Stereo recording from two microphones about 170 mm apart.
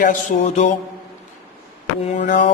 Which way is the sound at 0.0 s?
50° left (ahead or behind).